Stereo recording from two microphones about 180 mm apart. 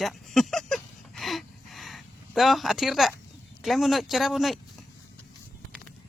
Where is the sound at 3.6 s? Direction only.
Centre (ahead or behind).